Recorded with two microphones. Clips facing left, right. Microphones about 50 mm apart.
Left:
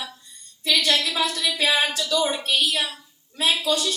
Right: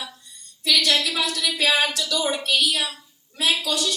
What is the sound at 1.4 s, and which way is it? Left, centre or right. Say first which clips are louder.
Speech: right 2 dB; centre.